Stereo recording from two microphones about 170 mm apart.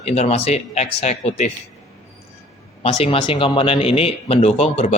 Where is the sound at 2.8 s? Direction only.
35° left (ahead or behind).